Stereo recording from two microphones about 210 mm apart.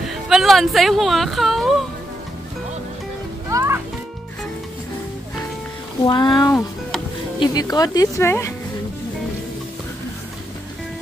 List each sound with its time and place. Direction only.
0.0 s speech: centre (ahead or behind)
3.4 s music: 15° right (ahead or behind)
6.0 s speech: 20° left (ahead or behind)